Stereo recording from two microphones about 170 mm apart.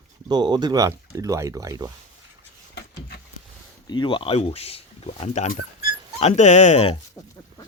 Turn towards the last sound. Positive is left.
turn(degrees=40)  # may be behind; listen again after turning